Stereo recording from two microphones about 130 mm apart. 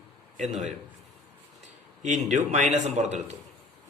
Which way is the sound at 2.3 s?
60° right (ahead or behind).